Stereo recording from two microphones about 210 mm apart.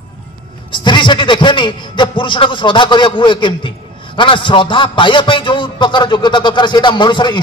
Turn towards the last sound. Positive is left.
turn(degrees=20)  # may be behind; listen again after turning